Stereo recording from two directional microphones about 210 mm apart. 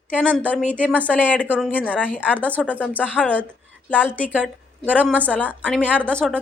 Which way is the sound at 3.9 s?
5° right (ahead or behind).